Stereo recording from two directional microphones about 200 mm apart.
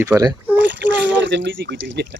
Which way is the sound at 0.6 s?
65° right (ahead or behind).